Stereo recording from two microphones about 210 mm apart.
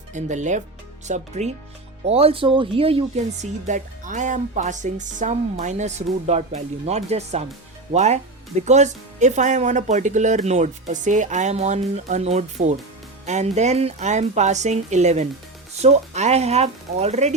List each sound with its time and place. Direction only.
0.1 s speech: 35° right (ahead or behind)